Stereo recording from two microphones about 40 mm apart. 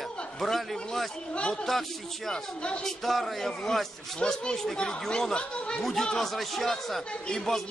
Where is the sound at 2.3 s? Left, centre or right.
Left.